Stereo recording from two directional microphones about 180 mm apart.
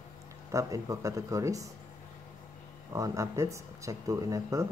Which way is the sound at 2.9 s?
15° right (ahead or behind).